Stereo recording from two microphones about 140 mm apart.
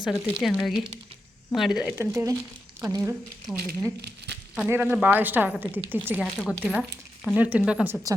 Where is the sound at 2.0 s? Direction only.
20° right (ahead or behind).